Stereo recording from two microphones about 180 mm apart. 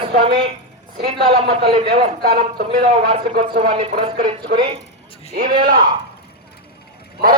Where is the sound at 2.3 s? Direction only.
55° right (ahead or behind).